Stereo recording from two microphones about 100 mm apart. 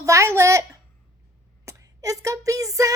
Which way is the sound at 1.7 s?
35° right (ahead or behind).